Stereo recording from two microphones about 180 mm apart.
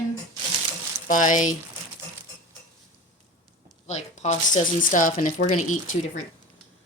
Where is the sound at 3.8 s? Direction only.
40° left (ahead or behind).